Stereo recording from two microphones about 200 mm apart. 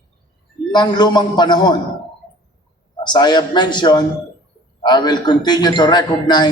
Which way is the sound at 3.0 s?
20° left (ahead or behind).